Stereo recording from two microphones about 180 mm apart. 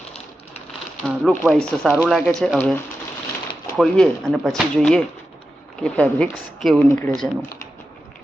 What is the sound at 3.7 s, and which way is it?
Speech, 5° left (ahead or behind).